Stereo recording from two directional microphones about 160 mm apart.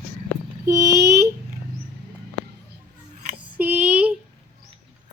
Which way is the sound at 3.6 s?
10° right (ahead or behind).